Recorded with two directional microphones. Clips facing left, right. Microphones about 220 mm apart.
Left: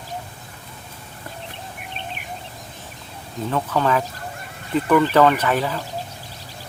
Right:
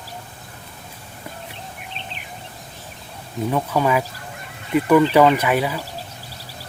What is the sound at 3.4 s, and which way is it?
Speech, 10° right (ahead or behind).